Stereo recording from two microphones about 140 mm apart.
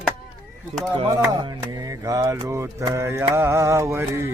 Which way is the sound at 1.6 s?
25° right (ahead or behind).